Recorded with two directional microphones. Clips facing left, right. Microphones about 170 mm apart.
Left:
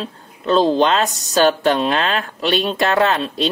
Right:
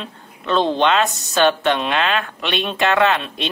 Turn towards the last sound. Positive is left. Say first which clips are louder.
# left 1 dB
turn(degrees=35)  # may be behind; listen again after turning